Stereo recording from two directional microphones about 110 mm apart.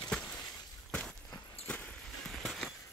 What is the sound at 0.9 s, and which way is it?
Walk, 5° left (ahead or behind).